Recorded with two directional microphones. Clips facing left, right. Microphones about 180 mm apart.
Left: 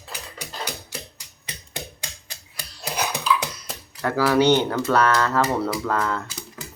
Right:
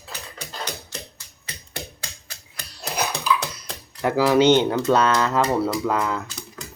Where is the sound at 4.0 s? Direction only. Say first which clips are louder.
Right 2 dB; 15° right (ahead or behind).